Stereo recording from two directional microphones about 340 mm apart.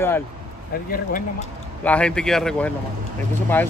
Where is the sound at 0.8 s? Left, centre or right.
Left.